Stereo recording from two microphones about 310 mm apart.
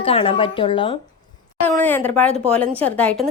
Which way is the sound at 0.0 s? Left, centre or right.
Centre.